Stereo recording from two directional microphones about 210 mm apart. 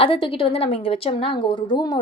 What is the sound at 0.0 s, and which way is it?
A woman's voice, 25° left (ahead or behind).